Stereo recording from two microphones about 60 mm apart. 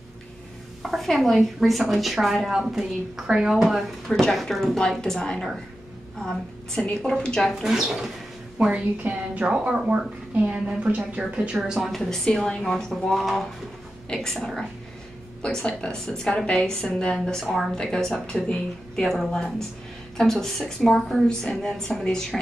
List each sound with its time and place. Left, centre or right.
0.8 s a woman's voice: centre
4.1 s a woman's voice: centre
7.6 s a woman's voice: centre
12.1 s a woman's voice: centre
13.1 s a woman's voice: centre
14.0 s a woman's voice: centre
17.7 s a woman's voice: centre